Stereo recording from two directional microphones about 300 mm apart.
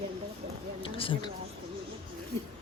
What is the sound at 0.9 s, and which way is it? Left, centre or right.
Speech, centre.